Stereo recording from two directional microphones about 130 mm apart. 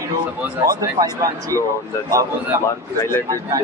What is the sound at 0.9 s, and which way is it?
Speech, 25° right (ahead or behind).